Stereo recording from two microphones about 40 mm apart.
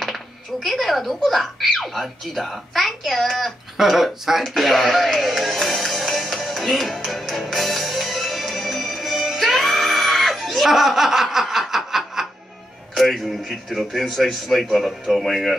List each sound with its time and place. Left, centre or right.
0.0 s speech: centre
3.7 s speech: centre
4.6 s music: centre
12.9 s speech: centre